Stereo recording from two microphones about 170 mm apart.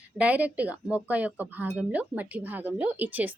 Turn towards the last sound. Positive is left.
turn(degrees=-10)  # may be behind; listen again after turning